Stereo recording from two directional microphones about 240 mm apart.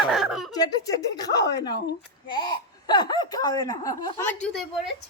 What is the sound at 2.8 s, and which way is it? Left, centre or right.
Speech, centre.